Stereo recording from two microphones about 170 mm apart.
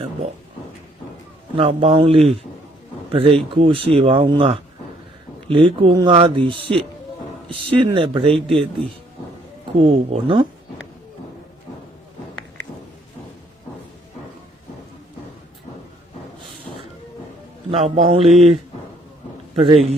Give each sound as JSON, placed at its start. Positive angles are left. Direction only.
{"t": 1.5, "sound": "speech", "side_deg": -35}
{"t": 9.7, "sound": "speech", "side_deg": -35}
{"t": 17.7, "sound": "speech", "side_deg": -40}